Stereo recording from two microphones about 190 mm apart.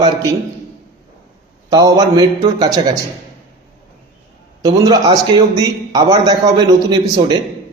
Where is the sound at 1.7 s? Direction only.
20° right (ahead or behind).